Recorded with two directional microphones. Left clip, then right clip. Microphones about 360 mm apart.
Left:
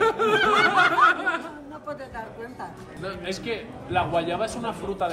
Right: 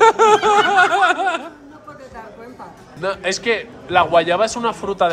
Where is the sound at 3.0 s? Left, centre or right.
Centre.